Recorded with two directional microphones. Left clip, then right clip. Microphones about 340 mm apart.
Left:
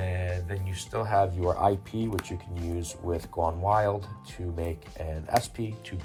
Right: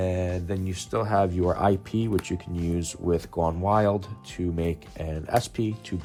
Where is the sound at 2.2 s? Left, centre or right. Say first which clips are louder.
Right 4 dB; centre.